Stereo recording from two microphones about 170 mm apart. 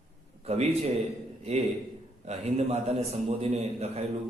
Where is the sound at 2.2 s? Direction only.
40° right (ahead or behind).